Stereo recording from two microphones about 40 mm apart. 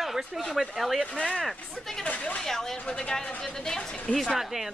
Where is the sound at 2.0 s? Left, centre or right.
Left.